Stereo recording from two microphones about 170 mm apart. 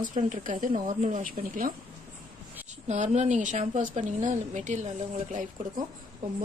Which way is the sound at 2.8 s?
45° right (ahead or behind).